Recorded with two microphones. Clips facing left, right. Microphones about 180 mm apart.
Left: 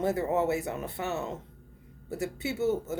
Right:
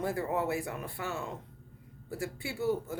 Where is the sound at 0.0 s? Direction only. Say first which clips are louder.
Left 5 dB; 20° left (ahead or behind).